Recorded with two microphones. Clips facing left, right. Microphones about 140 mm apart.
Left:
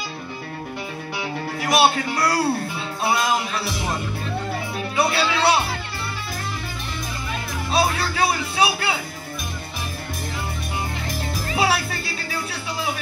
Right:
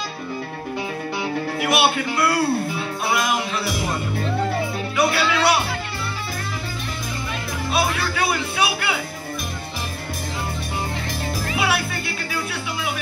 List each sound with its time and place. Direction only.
1.6 s speech: 35° left (ahead or behind)
4.9 s speech: 30° left (ahead or behind)
7.7 s speech: 35° left (ahead or behind)
11.5 s music: 35° left (ahead or behind)